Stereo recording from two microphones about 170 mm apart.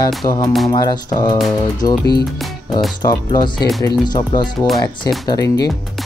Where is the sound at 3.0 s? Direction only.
25° left (ahead or behind).